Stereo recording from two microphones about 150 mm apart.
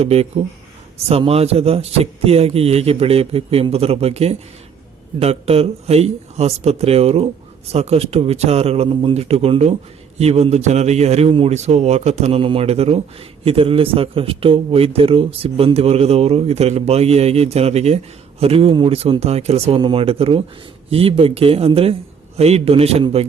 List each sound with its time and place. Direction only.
0.0 s a man's voice: 45° right (ahead or behind)